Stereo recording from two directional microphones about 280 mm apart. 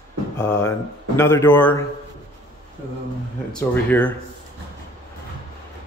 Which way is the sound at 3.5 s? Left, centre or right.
Centre.